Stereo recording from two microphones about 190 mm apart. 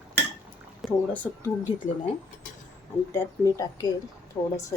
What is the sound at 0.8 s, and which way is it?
Speech, 10° left (ahead or behind).